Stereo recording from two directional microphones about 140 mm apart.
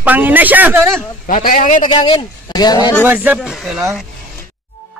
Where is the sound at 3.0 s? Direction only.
15° right (ahead or behind).